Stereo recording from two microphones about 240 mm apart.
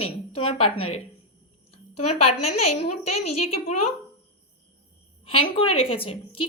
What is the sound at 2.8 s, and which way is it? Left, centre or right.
A woman's voice, left.